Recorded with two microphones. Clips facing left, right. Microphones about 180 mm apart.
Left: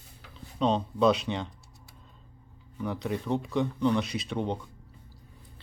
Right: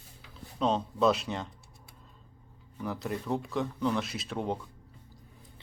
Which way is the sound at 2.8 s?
Centre (ahead or behind).